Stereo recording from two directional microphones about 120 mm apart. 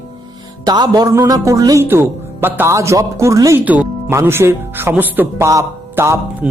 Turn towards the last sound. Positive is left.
turn(degrees=-20)  # may be behind; listen again after turning